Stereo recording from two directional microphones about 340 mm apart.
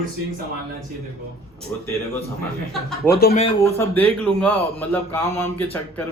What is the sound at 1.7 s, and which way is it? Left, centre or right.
A man's voice, centre.